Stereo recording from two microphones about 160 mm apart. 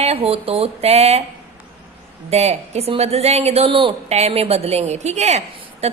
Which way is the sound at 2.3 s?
45° right (ahead or behind).